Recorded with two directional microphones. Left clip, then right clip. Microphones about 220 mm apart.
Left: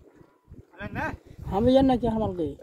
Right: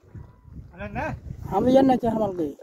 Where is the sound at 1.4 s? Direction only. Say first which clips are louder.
Right 2 dB; 15° right (ahead or behind).